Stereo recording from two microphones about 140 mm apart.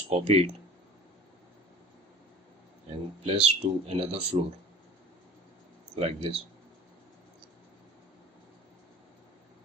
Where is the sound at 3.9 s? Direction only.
50° right (ahead or behind).